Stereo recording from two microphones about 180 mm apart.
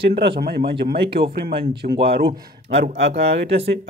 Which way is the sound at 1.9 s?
60° right (ahead or behind).